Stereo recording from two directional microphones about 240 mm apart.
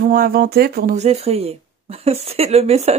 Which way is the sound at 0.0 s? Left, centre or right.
Right.